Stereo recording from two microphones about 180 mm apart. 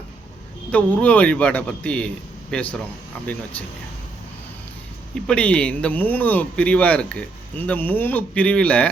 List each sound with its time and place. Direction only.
0.7 s speech: 10° left (ahead or behind)
5.2 s speech: 5° left (ahead or behind)